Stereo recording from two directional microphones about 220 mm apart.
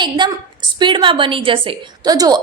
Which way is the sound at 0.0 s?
20° right (ahead or behind).